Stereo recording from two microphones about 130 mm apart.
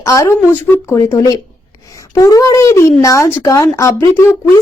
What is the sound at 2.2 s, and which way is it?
Speech, 25° left (ahead or behind).